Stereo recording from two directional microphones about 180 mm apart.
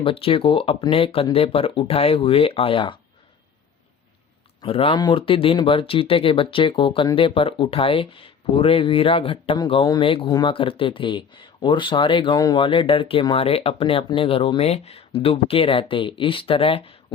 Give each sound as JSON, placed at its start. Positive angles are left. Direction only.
{"t": 0.0, "sound": "speech", "side_deg": 30}
{"t": 4.6, "sound": "speech", "side_deg": 30}